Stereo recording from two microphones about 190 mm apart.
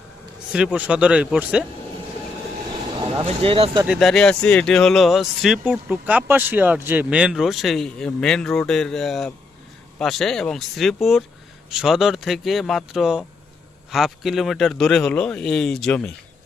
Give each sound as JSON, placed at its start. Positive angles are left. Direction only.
{"t": 0.5, "sound": "speech", "side_deg": -5}
{"t": 3.0, "sound": "speech", "side_deg": -25}
{"t": 3.8, "sound": "speech", "side_deg": 0}